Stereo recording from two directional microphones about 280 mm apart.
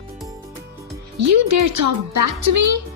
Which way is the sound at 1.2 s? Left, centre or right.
Right.